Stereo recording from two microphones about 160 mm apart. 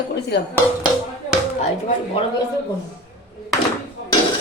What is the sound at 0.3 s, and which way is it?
Speech, 90° left.